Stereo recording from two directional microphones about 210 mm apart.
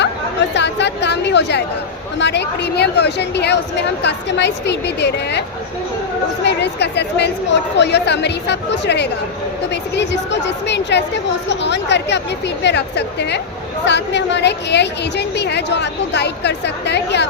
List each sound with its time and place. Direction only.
0.5 s chatter: 55° left (ahead or behind)
2.1 s a woman's voice: 55° left (ahead or behind)
6.4 s a woman's voice: 55° left (ahead or behind)